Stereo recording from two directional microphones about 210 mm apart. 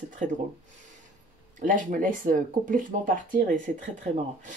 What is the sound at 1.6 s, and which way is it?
Speech, 40° right (ahead or behind).